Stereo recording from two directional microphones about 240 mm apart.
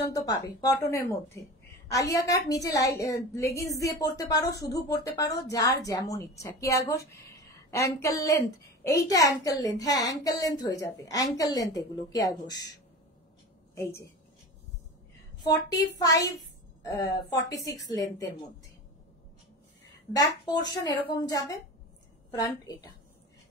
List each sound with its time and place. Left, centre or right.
0.0 s a woman's voice: centre
15.4 s a woman's voice: centre
20.1 s a woman's voice: centre
22.3 s a woman's voice: centre